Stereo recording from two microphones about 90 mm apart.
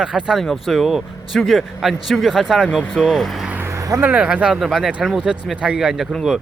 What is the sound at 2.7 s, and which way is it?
Speech, 10° left (ahead or behind).